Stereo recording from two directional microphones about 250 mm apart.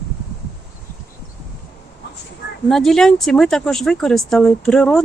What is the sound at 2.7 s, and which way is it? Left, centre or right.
Speech, centre.